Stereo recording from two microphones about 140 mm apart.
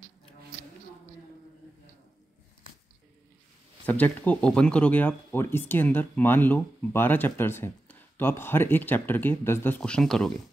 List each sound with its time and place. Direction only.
3.8 s speech: 10° left (ahead or behind)
9.8 s speech: 5° left (ahead or behind)